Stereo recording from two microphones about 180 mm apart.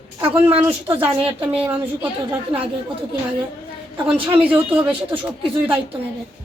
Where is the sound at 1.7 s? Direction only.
10° right (ahead or behind).